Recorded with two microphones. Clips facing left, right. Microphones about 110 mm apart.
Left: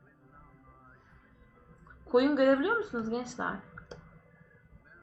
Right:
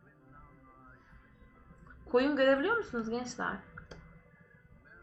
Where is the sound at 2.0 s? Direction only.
5° left (ahead or behind).